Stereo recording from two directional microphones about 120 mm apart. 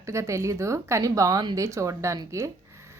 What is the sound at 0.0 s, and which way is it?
A woman's voice, 25° right (ahead or behind).